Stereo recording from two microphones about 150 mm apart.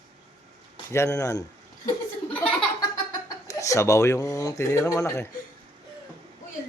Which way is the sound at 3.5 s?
20° left (ahead or behind).